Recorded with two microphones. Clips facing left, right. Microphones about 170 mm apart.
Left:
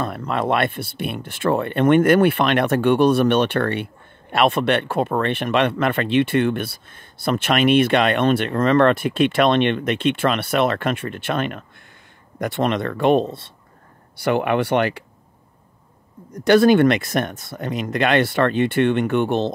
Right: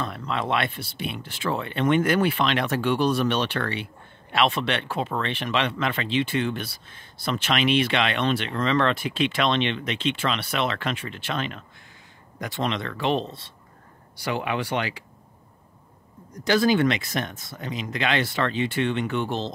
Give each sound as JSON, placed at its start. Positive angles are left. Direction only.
{"t": 0.0, "sound": "speech", "side_deg": 50}
{"t": 16.4, "sound": "speech", "side_deg": 60}